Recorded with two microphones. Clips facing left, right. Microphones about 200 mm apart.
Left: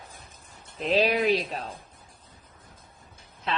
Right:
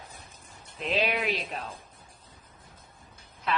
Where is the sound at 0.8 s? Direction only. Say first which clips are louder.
Left 5 dB; 35° left (ahead or behind).